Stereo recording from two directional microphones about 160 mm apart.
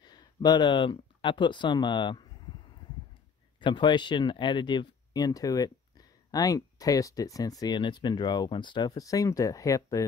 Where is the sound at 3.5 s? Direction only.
30° left (ahead or behind).